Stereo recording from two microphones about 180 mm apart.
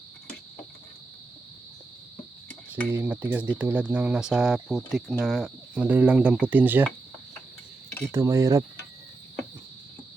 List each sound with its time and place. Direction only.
2.9 s speech: 10° right (ahead or behind)
8.1 s speech: 15° right (ahead or behind)